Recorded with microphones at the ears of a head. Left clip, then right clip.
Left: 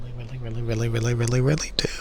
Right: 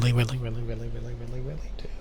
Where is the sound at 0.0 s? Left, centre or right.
Right.